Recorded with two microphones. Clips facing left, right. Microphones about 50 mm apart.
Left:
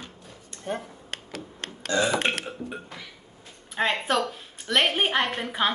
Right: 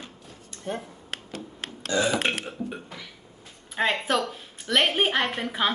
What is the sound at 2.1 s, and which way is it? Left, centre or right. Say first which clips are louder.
A woman's voice: even; centre.